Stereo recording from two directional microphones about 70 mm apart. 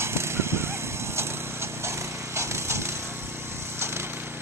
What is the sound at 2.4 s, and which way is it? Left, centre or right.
Wood, right.